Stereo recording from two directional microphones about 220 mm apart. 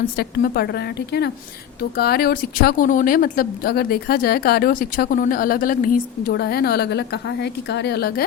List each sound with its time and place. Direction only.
0.2 s speech: 45° left (ahead or behind)